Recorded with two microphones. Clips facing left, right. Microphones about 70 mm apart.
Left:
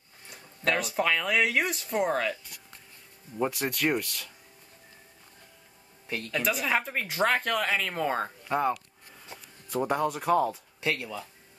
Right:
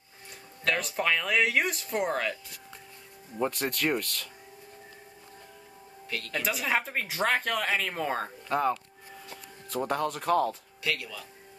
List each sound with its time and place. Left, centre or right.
0.7 s speech: centre
3.3 s speech: centre
6.0 s speech: left
6.4 s speech: centre
9.8 s speech: centre
10.8 s speech: left